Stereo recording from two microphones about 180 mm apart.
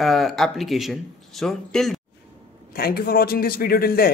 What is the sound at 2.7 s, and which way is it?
A man's voice, 55° left (ahead or behind).